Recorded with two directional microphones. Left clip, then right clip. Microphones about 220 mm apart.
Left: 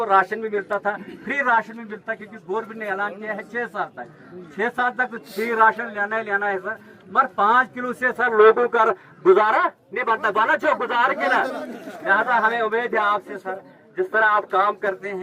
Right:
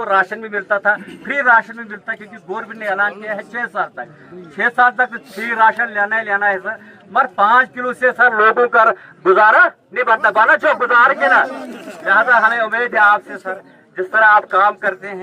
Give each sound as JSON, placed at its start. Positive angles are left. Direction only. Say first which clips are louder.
{"t": 0.0, "sound": "a man's voice", "louder": "right 2 dB", "side_deg": -15}